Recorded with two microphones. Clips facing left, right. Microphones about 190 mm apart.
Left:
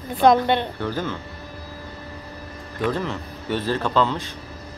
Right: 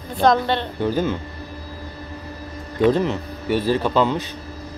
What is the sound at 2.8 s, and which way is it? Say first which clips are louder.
A man's voice: right 7 dB; 20° right (ahead or behind).